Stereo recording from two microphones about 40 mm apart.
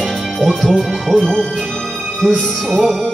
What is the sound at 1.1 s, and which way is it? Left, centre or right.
Music, centre.